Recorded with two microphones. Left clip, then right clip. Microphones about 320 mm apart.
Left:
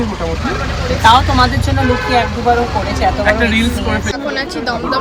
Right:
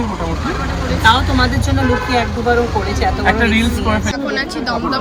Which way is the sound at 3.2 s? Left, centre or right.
Right.